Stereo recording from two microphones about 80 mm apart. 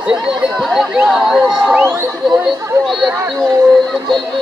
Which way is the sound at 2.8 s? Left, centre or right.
Centre.